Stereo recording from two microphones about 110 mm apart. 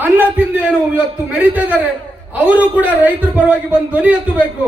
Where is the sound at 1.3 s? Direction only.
15° right (ahead or behind).